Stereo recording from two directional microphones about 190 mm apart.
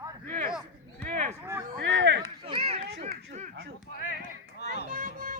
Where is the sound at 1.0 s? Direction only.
40° right (ahead or behind).